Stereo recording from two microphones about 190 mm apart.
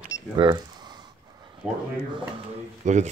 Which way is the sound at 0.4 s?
20° right (ahead or behind).